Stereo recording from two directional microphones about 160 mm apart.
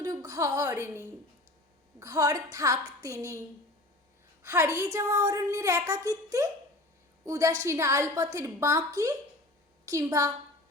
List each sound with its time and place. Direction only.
0.0 s a woman's voice: 20° right (ahead or behind)
4.4 s a woman's voice: 15° right (ahead or behind)